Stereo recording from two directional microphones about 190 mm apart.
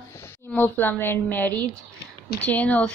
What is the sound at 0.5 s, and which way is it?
A woman's voice, 10° left (ahead or behind).